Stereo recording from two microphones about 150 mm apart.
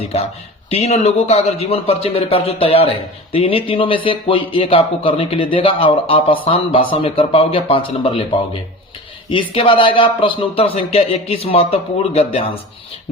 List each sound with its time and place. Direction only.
0.0 s speech: 40° left (ahead or behind)
9.3 s speech: 35° left (ahead or behind)